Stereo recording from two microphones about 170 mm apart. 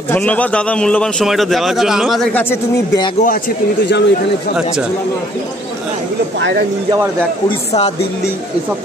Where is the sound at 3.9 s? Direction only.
90° left.